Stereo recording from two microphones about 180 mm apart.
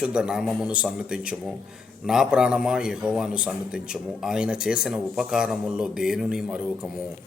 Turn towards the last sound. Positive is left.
turn(degrees=-5)  # may be behind; listen again after turning